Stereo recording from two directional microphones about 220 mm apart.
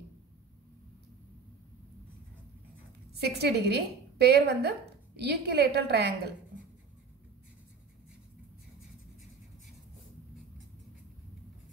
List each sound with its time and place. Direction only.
3.2 s a woman's voice: 45° right (ahead or behind)